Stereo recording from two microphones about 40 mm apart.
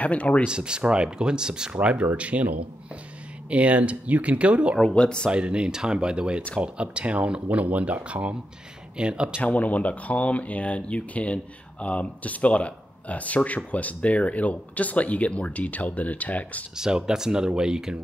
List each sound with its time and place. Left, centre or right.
0.0 s speech: left
0.5 s speech: right
1.7 s speech: right
3.4 s speech: right
4.9 s speech: left
5.3 s speech: right
7.4 s speech: right
9.4 s speech: left
16.7 s speech: centre